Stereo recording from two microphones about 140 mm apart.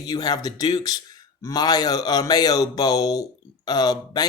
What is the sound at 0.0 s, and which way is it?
Speech, 30° left (ahead or behind).